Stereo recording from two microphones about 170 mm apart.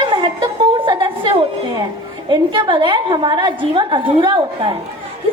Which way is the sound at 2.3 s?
25° right (ahead or behind).